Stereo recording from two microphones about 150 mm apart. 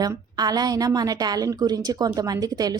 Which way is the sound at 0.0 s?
25° right (ahead or behind).